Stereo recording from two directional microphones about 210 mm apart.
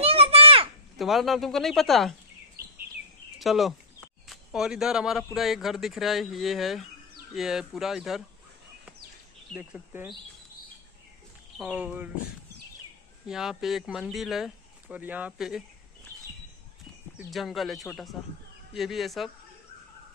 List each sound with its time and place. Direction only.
0.0 s a sound: 30° right (ahead or behind)
0.9 s speech: centre (ahead or behind)
3.3 s speech: centre (ahead or behind)
9.5 s speech: 5° right (ahead or behind)
11.5 s speech: 5° right (ahead or behind)
13.3 s speech: centre (ahead or behind)
17.3 s speech: centre (ahead or behind)